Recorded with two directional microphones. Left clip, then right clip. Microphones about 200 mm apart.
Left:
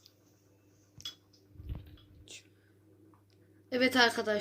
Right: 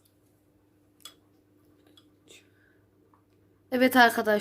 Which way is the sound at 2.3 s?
Centre (ahead or behind).